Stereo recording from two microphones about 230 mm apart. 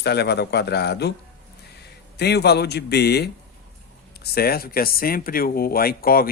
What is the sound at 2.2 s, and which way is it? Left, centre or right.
Speech, left.